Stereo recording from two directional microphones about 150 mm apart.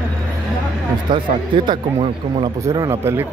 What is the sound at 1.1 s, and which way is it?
Speech, 35° right (ahead or behind).